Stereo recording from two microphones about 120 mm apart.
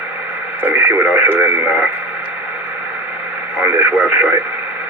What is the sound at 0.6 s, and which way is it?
Speech, 15° right (ahead or behind).